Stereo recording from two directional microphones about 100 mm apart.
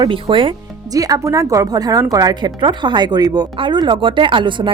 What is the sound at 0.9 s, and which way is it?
Speech, 35° right (ahead or behind).